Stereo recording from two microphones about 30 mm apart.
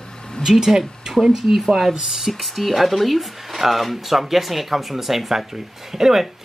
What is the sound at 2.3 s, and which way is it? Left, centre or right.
Speech, centre.